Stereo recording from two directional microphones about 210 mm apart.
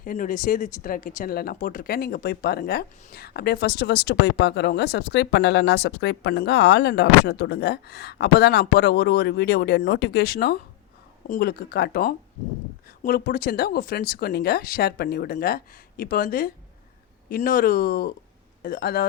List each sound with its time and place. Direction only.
0.0 s speech: 40° left (ahead or behind)